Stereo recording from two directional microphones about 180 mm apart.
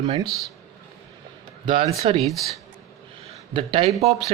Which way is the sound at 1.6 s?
30° right (ahead or behind).